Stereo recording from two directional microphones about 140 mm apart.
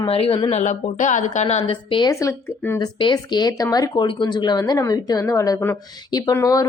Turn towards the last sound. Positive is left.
turn(degrees=25)  # may be behind; listen again after turning